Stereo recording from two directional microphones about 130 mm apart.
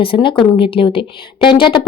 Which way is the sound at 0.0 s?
40° left (ahead or behind).